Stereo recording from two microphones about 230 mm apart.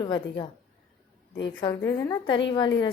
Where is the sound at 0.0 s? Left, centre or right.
Centre.